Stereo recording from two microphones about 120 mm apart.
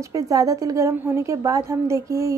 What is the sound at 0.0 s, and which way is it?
Speech, 25° right (ahead or behind).